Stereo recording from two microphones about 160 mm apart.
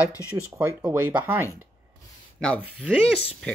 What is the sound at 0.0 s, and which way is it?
Speech, 20° left (ahead or behind).